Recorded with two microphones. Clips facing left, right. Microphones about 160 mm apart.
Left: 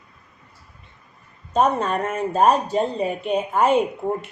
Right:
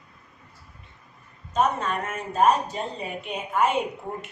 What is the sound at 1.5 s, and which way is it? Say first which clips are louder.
Speech: left 5 dB; 35° left (ahead or behind).